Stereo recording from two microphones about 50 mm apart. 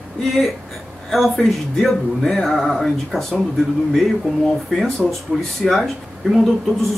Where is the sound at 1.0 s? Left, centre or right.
Centre.